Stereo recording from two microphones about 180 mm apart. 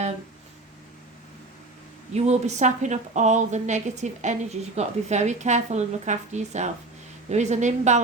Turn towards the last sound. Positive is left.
turn(degrees=-40)  # may be behind; listen again after turning